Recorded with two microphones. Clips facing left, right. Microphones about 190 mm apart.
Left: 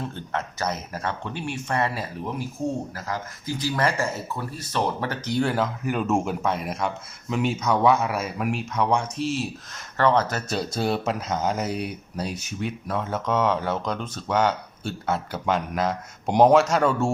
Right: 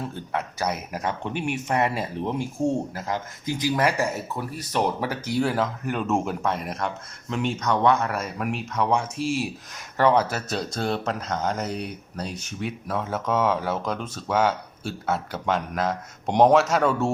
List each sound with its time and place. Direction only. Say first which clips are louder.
0.0 s speech: right 1 dB; 10° right (ahead or behind)